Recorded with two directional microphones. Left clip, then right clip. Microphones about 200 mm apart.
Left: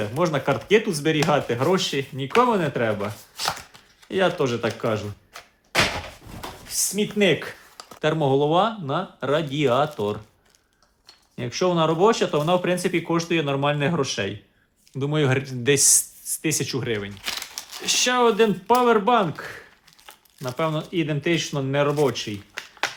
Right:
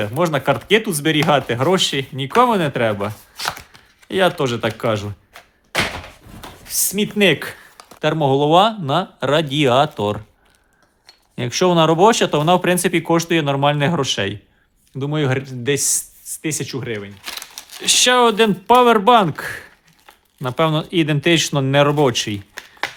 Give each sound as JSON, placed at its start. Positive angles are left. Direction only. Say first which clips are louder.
{"t": 0.2, "sound": "speech", "louder": "right 5 dB", "side_deg": -30}
{"t": 3.3, "sound": "chopping", "louder": "right 2 dB", "side_deg": -10}
{"t": 4.1, "sound": "speech", "louder": "right 4 dB", "side_deg": -35}
{"t": 6.7, "sound": "speech", "louder": "right 4 dB", "side_deg": -55}
{"t": 7.2, "sound": "speech", "louder": "right 5 dB", "side_deg": -35}
{"t": 14.9, "sound": "speech", "louder": "right 2 dB", "side_deg": -20}
{"t": 17.8, "sound": "speech", "louder": "right 6 dB", "side_deg": -35}
{"t": 22.6, "sound": "a sound", "louder": "even", "side_deg": -15}